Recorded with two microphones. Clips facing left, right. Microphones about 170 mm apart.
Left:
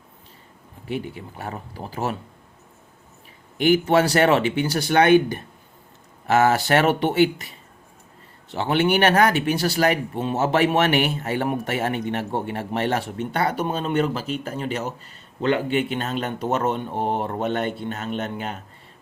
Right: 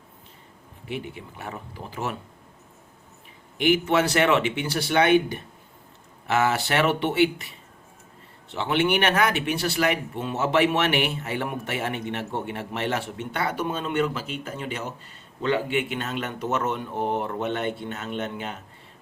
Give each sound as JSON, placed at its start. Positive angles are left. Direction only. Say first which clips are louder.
{"t": 0.9, "sound": "a man's voice", "louder": "left 4 dB", "side_deg": 40}
{"t": 3.6, "sound": "a man's voice", "louder": "left 3 dB", "side_deg": 35}